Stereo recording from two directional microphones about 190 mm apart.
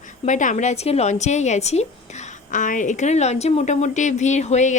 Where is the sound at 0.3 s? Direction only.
40° left (ahead or behind).